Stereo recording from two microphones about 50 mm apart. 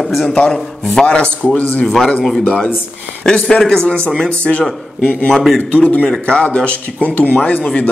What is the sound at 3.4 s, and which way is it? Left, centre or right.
A man's voice, centre.